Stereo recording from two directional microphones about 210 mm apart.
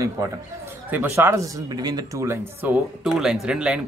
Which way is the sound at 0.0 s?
10° right (ahead or behind).